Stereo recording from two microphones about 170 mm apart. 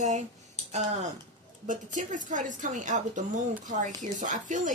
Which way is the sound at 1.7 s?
50° right (ahead or behind).